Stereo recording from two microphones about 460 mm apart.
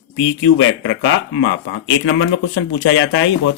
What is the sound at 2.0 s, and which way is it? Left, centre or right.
Speech, left.